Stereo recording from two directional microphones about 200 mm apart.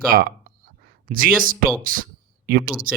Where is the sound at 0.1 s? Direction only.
45° right (ahead or behind).